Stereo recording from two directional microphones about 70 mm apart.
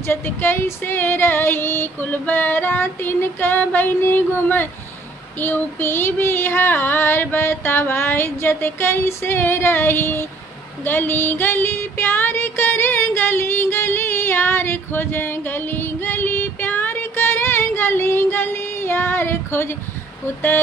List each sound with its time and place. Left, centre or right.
0.0 s child singing: left
10.8 s female singing: left
20.2 s child singing: left